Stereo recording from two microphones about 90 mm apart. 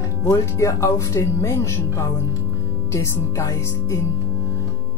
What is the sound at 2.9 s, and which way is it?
Speech, 30° left (ahead or behind).